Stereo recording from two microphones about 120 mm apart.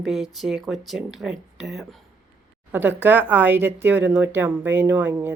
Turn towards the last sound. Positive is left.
turn(degrees=-15)  # may be behind; listen again after turning